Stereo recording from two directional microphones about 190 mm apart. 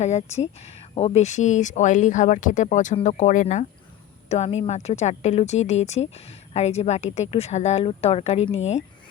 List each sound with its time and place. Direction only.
0.0 s speech: 35° left (ahead or behind)